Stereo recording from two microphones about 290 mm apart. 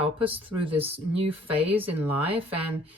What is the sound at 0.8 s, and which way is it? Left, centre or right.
Speech, centre.